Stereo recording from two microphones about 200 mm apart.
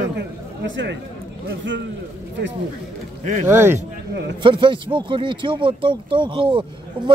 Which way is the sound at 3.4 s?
10° right (ahead or behind).